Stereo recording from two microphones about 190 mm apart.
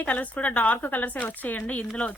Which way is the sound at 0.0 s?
5° left (ahead or behind).